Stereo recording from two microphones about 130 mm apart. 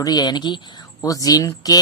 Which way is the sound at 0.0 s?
30° left (ahead or behind).